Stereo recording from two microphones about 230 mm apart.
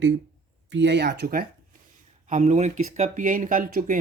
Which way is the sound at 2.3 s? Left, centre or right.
Right.